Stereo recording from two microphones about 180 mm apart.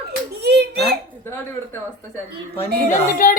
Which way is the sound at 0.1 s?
65° right (ahead or behind).